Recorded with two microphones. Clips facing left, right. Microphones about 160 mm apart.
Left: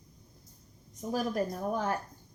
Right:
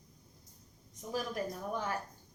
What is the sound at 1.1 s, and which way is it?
Speech, 40° left (ahead or behind).